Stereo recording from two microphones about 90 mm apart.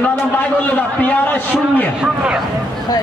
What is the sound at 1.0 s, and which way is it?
Speech, 15° left (ahead or behind).